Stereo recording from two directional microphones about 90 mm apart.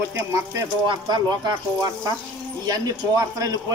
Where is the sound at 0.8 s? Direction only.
55° right (ahead or behind).